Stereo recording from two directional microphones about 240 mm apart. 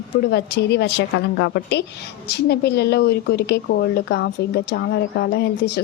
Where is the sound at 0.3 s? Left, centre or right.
Left.